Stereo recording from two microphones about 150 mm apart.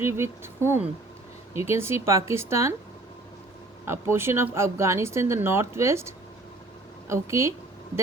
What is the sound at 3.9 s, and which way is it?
A woman's voice, 15° right (ahead or behind).